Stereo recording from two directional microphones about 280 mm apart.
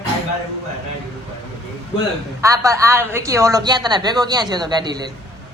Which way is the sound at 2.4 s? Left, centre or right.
Centre.